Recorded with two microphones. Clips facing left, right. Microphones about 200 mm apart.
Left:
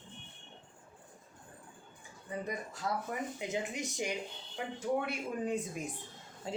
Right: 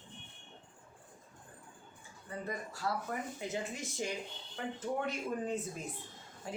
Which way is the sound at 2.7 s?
20° left (ahead or behind).